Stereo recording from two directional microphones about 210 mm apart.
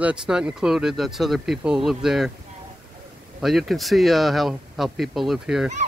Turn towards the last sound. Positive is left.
turn(degrees=0)  # may be behind; listen again after turning